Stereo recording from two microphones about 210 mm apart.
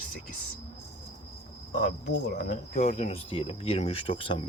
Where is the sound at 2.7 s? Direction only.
35° left (ahead or behind).